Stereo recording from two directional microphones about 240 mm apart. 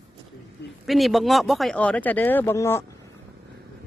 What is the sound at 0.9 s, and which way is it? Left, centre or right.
Speech, centre.